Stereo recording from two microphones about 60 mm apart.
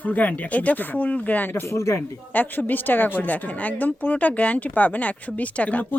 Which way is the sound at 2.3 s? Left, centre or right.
Left.